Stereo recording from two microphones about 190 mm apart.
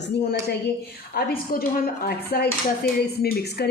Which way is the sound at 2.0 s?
55° left (ahead or behind).